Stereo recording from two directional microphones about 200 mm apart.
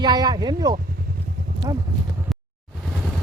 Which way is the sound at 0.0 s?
20° right (ahead or behind).